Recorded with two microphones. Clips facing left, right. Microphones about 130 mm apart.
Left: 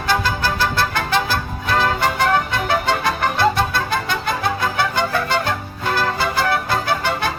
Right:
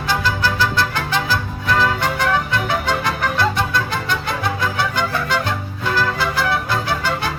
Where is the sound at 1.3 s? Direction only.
50° left (ahead or behind).